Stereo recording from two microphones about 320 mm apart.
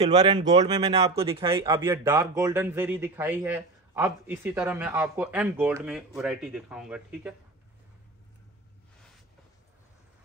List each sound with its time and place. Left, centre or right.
0.0 s speech: centre